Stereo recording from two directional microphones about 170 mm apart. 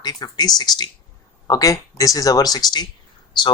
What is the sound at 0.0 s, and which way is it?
Speech, 25° left (ahead or behind).